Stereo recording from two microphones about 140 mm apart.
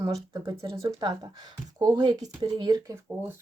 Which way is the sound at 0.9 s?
30° right (ahead or behind).